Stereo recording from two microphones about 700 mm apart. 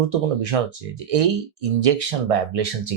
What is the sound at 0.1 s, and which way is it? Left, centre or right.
Speech, right.